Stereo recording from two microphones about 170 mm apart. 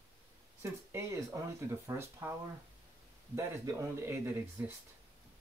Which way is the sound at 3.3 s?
15° right (ahead or behind).